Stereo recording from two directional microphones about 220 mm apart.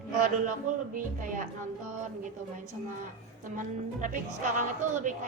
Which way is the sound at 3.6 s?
35° right (ahead or behind).